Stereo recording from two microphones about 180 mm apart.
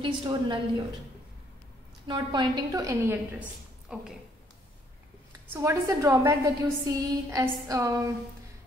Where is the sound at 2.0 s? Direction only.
25° right (ahead or behind); by 4.1 s 5° right (ahead or behind).